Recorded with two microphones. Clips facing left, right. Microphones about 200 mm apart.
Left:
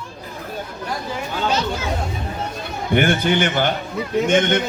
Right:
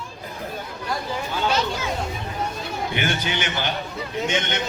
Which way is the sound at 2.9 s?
50° left (ahead or behind).